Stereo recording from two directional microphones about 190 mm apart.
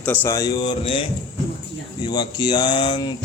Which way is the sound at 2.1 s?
20° left (ahead or behind).